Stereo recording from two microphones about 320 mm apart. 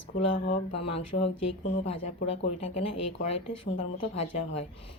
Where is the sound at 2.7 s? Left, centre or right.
Centre.